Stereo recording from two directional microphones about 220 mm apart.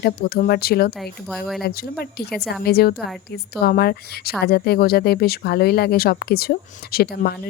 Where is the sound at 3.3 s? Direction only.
45° left (ahead or behind).